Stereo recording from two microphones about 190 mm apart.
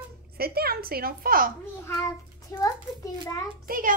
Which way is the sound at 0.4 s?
55° right (ahead or behind).